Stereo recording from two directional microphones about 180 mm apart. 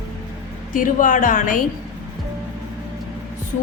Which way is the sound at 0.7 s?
45° left (ahead or behind).